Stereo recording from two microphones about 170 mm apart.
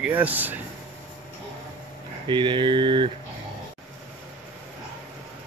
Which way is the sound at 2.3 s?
30° right (ahead or behind).